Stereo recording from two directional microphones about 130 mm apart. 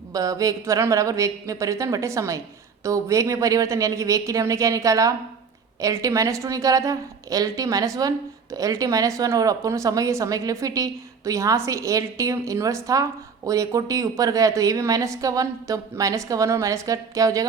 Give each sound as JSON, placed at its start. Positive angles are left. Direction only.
{"t": 0.1, "sound": "a woman's voice", "side_deg": -25}